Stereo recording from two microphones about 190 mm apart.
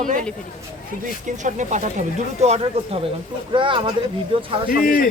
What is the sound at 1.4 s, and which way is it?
Speech, 40° right (ahead or behind).